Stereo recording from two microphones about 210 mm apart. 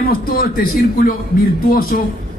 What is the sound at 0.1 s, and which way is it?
Speech, 45° left (ahead or behind).